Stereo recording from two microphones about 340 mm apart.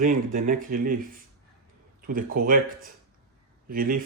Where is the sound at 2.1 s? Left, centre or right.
Right.